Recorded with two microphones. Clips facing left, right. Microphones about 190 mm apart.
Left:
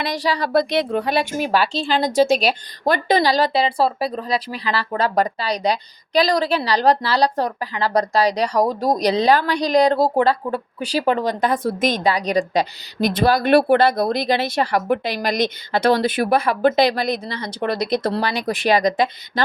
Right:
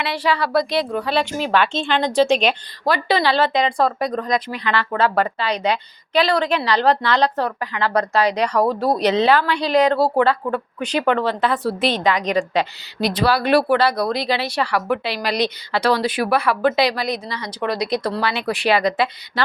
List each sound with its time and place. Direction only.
0.0 s a woman's voice: 40° left (ahead or behind)
1.5 s a woman's voice: 35° left (ahead or behind)
8.5 s speech: 15° left (ahead or behind)
9.0 s a woman's voice: 35° left (ahead or behind)